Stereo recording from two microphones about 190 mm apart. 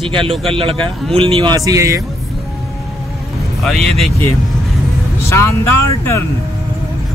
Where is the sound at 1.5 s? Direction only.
15° right (ahead or behind).